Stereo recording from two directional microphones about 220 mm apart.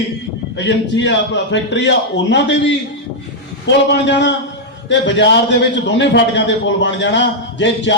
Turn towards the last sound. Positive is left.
turn(degrees=55)  # may be behind; listen again after turning